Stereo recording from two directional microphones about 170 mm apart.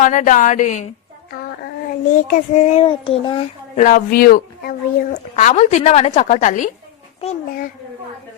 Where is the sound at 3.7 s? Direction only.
55° left (ahead or behind).